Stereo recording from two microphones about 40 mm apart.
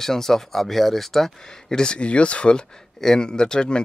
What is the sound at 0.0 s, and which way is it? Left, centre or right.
Speech, centre.